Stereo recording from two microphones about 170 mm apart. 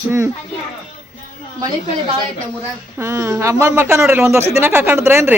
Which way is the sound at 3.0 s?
15° right (ahead or behind).